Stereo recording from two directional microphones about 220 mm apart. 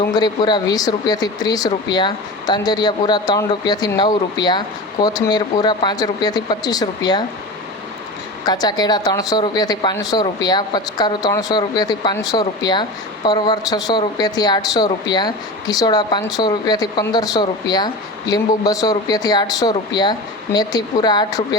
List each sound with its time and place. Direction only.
0.1 s speech: 20° left (ahead or behind)
8.4 s speech: 20° left (ahead or behind)